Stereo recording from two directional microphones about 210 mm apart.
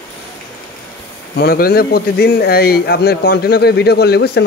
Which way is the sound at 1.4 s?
45° left (ahead or behind).